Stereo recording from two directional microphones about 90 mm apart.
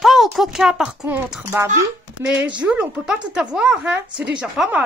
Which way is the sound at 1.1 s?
20° right (ahead or behind).